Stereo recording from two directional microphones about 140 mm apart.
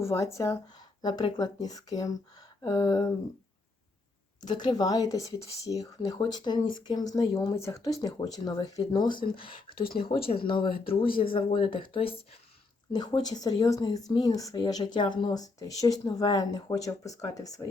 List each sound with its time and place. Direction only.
0.0 s speech: 20° left (ahead or behind)
1.0 s speech: 30° left (ahead or behind)
4.4 s speech: 30° left (ahead or behind)